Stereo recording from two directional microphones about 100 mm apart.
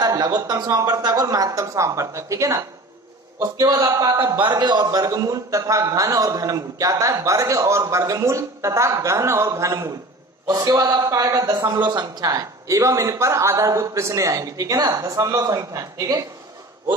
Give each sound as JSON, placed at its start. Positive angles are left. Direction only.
{"t": 0.0, "sound": "a man's voice", "side_deg": -40}
{"t": 4.4, "sound": "a man's voice", "side_deg": -50}
{"t": 11.5, "sound": "a man's voice", "side_deg": -45}